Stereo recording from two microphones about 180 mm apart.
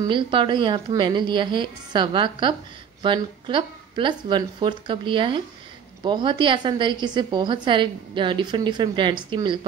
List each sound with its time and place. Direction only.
0.0 s a woman's voice: 25° right (ahead or behind)